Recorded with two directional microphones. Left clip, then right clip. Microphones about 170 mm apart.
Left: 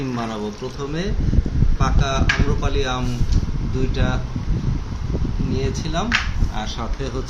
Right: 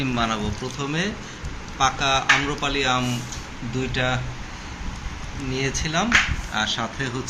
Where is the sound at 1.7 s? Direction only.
5° left (ahead or behind).